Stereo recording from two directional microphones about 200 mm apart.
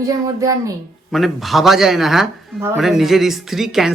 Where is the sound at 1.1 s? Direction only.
Centre (ahead or behind).